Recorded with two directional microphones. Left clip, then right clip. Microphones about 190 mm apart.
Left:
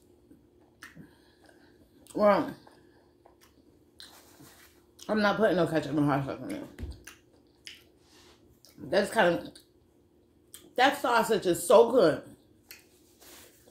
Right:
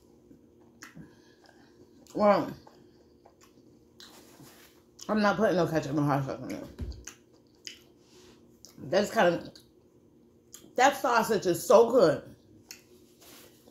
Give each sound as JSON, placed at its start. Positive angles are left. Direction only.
{"t": 2.0, "sound": "speech", "side_deg": 5}
{"t": 4.9, "sound": "speech", "side_deg": 0}
{"t": 8.6, "sound": "speech", "side_deg": 5}
{"t": 10.8, "sound": "speech", "side_deg": 0}